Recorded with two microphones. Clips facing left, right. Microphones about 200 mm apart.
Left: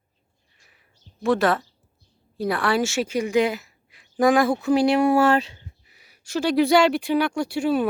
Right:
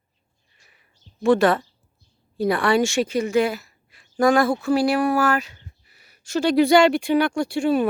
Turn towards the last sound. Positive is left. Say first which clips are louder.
# right 2 dB
turn(degrees=5)  # may be behind; listen again after turning